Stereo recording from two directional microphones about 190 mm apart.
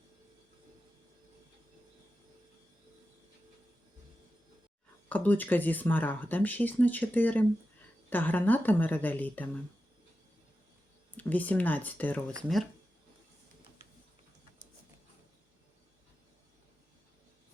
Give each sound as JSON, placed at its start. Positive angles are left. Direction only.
{"t": 5.0, "sound": "speech", "side_deg": 10}
{"t": 11.1, "sound": "speech", "side_deg": 10}